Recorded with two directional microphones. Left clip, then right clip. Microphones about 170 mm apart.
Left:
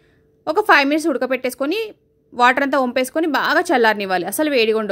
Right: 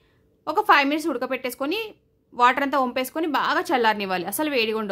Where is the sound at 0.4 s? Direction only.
25° left (ahead or behind).